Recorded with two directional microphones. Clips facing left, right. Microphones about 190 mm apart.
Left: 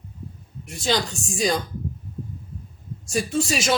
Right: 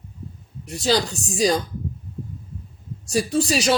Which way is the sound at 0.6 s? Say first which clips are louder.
Right 3 dB; 35° right (ahead or behind).